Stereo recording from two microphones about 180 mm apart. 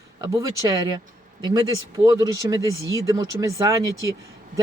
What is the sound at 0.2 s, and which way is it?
A man's voice, 20° right (ahead or behind).